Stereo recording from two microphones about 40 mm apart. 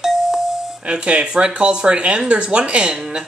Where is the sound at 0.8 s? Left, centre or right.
Right.